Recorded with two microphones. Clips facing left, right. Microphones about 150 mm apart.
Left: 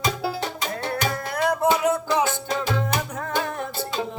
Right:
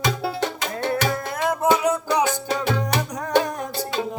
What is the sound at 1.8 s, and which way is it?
Music, 20° right (ahead or behind).